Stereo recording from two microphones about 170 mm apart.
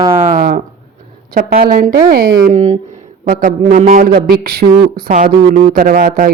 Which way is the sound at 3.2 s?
55° right (ahead or behind).